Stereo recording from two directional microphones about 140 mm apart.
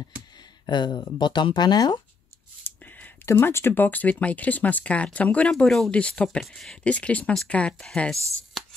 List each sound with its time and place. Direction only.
0.7 s speech: 30° left (ahead or behind)
2.6 s speech: 10° left (ahead or behind)